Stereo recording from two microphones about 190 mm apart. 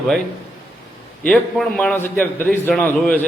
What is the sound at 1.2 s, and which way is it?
A man's voice, 5° left (ahead or behind).